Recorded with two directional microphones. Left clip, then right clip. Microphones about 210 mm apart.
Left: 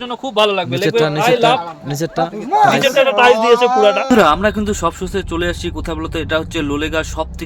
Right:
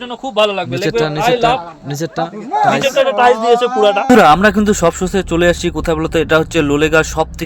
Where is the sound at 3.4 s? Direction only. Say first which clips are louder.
Even; 5° right (ahead or behind).